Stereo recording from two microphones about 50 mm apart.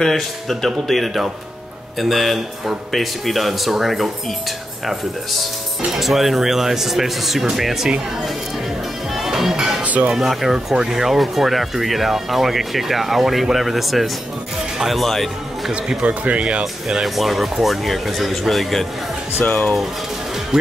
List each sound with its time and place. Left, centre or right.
0.0 s speech: centre
9.1 s music: centre
10.0 s speech: centre
16.0 s speech: right
17.0 s speech: centre